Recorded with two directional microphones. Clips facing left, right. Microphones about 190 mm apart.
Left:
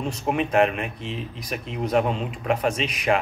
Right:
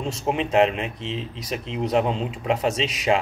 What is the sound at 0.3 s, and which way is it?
A man's voice, 25° right (ahead or behind).